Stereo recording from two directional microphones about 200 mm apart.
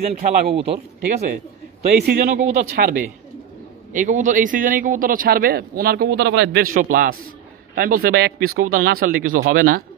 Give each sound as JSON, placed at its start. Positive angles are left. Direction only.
{"t": 0.0, "sound": "speech", "side_deg": -35}
{"t": 2.0, "sound": "speech", "side_deg": -55}
{"t": 2.3, "sound": "speech", "side_deg": -35}